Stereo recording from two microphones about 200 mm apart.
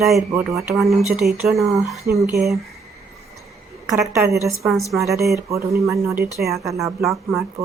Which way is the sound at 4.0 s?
10° right (ahead or behind).